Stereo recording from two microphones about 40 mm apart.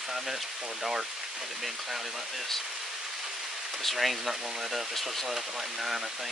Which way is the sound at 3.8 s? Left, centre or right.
Centre.